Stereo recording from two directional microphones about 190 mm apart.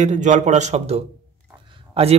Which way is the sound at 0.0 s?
40° right (ahead or behind).